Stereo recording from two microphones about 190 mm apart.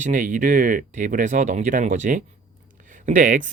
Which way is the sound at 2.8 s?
40° right (ahead or behind).